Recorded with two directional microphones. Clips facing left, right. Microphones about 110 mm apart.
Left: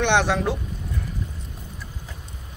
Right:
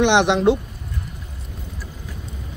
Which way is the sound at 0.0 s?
15° right (ahead or behind).